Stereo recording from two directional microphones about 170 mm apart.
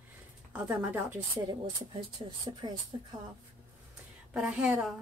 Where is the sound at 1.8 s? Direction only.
30° right (ahead or behind).